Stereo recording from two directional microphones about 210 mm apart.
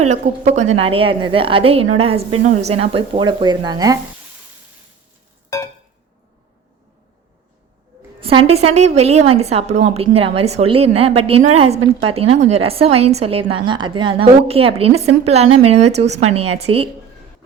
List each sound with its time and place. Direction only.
0.1 s a woman's voice: 35° right (ahead or behind)
8.2 s a woman's voice: 25° right (ahead or behind)